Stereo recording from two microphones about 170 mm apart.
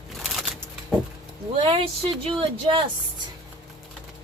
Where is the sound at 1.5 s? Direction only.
35° right (ahead or behind).